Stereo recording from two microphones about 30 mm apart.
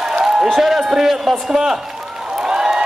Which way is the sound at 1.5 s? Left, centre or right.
Centre.